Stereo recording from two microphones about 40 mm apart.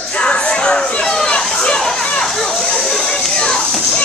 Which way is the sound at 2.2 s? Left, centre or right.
Centre.